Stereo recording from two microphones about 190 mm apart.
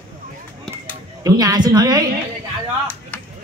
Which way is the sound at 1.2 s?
20° right (ahead or behind).